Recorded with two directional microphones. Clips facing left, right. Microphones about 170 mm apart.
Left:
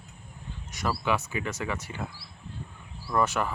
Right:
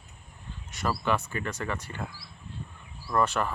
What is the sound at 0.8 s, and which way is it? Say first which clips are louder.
Speech: even; 10° left (ahead or behind).